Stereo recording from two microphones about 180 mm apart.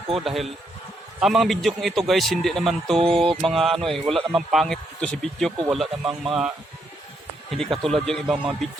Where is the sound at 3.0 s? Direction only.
30° right (ahead or behind).